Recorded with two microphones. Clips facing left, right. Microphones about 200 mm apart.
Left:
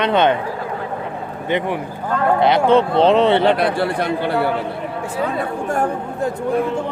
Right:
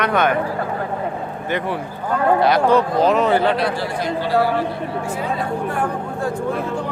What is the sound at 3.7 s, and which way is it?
Speech, 60° left (ahead or behind).